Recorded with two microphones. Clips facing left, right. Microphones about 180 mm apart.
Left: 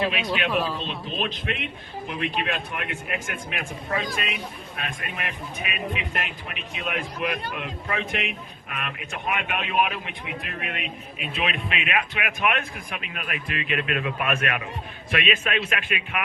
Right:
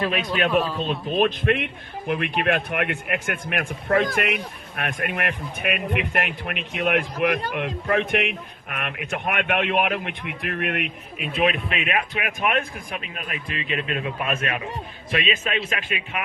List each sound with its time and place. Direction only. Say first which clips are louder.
0.5 s speech: right 5 dB; centre (ahead or behind)
0.9 s a man's voice: right 8 dB; 50° right (ahead or behind); by 16.2 s 30° right (ahead or behind)